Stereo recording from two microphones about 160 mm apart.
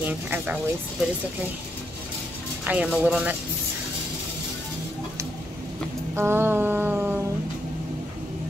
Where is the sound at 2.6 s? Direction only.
10° right (ahead or behind).